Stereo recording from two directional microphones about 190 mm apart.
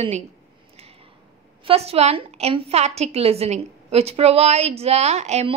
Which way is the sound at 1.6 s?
30° right (ahead or behind).